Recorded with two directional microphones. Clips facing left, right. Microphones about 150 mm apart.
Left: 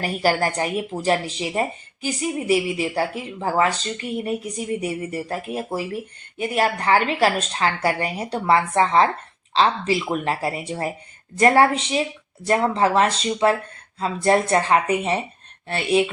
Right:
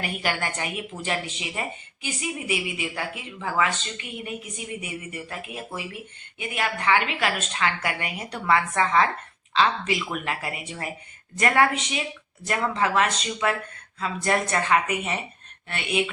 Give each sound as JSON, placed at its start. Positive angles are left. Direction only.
{"t": 0.0, "sound": "speech", "side_deg": 35}